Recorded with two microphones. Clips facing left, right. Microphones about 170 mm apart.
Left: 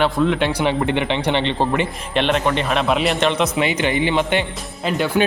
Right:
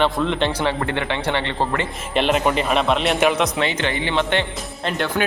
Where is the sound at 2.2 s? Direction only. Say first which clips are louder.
Even; 5° right (ahead or behind).